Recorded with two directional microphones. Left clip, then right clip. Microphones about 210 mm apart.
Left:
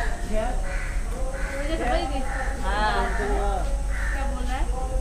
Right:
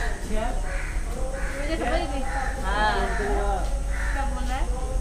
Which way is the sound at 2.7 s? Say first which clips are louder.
Right 1 dB; 10° right (ahead or behind).